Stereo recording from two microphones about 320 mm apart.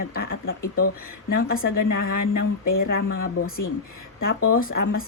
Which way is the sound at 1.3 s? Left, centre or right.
Left.